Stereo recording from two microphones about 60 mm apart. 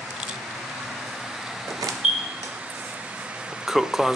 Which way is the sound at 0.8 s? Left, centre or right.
Centre.